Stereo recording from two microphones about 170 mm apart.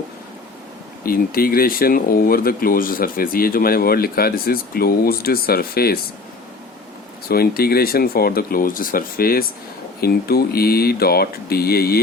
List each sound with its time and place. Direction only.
1.0 s speech: 60° left (ahead or behind)
7.3 s speech: 65° left (ahead or behind)